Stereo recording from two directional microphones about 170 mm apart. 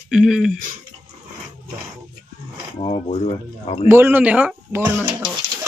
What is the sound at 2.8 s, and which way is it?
Speech, 35° left (ahead or behind).